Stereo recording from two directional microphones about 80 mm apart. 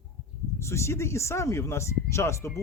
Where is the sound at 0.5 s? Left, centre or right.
Left.